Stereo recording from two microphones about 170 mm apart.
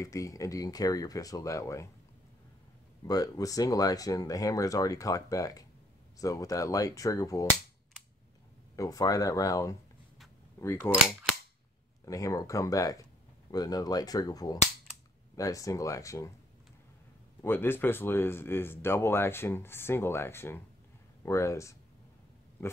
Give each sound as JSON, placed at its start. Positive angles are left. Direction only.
{"t": 0.0, "sound": "speech", "side_deg": 20}
{"t": 3.1, "sound": "speech", "side_deg": 20}
{"t": 8.7, "sound": "speech", "side_deg": 20}
{"t": 12.1, "sound": "speech", "side_deg": 20}
{"t": 17.4, "sound": "speech", "side_deg": 15}